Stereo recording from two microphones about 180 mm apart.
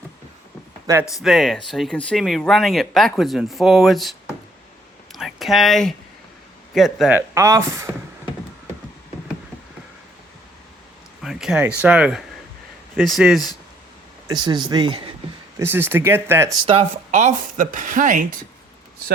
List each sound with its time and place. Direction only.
1.2 s speech: centre (ahead or behind)
5.1 s a sound: centre (ahead or behind)
6.7 s speech: centre (ahead or behind)
11.2 s a sound: centre (ahead or behind)
11.8 s speech: 5° right (ahead or behind)
14.3 s speech: 25° right (ahead or behind)
15.5 s speech: 10° right (ahead or behind)
16.6 s speech: 35° right (ahead or behind)